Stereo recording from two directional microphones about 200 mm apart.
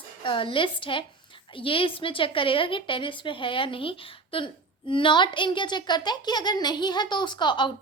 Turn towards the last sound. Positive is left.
turn(degrees=25)  # may be behind; listen again after turning